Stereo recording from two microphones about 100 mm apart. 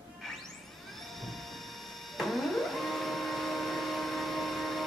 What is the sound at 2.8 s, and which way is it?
Vehicle, centre (ahead or behind).